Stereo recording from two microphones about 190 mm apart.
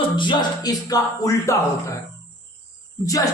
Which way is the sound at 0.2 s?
20° left (ahead or behind).